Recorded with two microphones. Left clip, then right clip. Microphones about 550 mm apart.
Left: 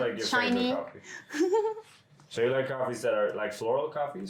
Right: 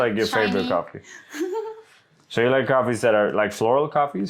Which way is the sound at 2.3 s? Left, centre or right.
Right.